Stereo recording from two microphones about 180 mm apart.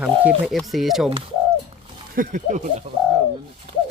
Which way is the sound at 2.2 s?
45° right (ahead or behind).